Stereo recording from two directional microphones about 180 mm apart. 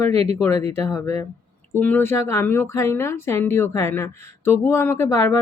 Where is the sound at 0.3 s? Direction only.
15° left (ahead or behind).